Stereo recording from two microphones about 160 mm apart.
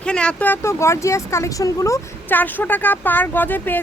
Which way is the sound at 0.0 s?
5° left (ahead or behind).